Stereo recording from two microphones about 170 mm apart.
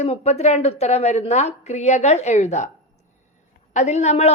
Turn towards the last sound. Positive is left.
turn(degrees=40)  # may be behind; listen again after turning